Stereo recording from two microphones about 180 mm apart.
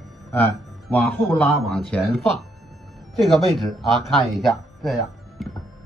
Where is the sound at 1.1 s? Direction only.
10° left (ahead or behind).